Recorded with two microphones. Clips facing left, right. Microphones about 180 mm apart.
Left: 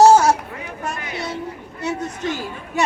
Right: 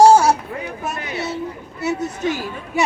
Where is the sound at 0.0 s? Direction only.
10° right (ahead or behind).